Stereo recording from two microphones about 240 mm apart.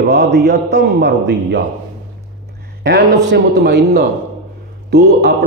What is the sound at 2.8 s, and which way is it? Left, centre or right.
Speech, right.